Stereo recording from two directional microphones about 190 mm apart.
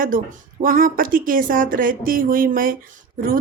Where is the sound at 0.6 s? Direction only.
50° right (ahead or behind).